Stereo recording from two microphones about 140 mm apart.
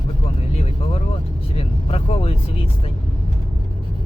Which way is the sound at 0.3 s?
45° left (ahead or behind).